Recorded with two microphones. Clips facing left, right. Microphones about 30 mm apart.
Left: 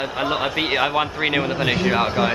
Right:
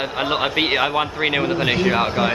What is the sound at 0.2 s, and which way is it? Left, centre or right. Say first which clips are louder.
Speech: right 2 dB; centre.